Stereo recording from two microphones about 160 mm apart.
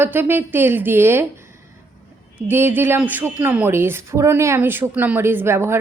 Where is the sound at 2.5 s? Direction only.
15° right (ahead or behind).